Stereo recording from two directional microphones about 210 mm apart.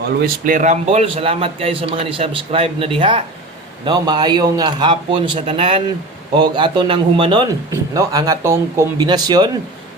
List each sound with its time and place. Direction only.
0.2 s a man's voice: 40° right (ahead or behind); by 9.5 s 20° right (ahead or behind)